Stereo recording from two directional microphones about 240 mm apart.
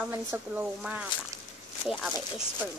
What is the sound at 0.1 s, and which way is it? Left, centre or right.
Speech, centre.